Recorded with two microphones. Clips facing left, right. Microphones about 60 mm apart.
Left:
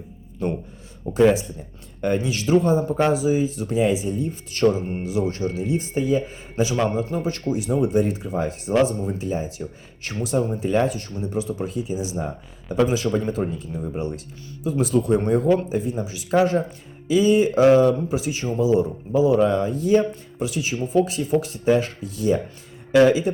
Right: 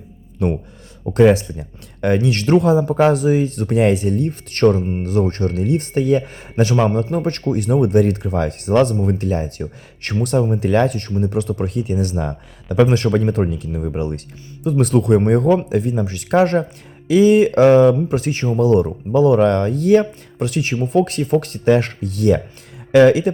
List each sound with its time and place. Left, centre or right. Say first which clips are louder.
0.4 s a man's voice: right 5 dB; right
3.0 s a man's voice: right 5 dB; right